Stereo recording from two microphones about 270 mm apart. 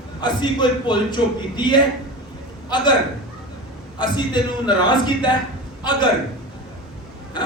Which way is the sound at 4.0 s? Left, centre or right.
Centre.